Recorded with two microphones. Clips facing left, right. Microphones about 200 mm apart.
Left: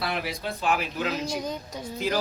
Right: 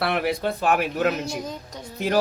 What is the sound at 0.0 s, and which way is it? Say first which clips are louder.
A man's voice: right 7 dB; 60° right (ahead or behind).